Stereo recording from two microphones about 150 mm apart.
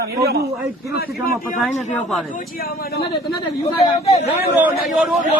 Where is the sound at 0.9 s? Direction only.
90° left.